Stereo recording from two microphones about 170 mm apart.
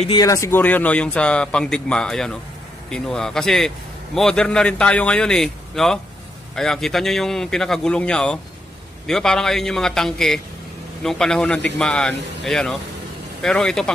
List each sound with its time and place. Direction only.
0.1 s a man's voice: 20° left (ahead or behind); by 13.9 s 5° left (ahead or behind)